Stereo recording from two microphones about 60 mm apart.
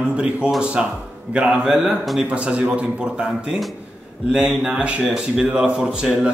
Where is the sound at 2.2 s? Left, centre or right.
Right.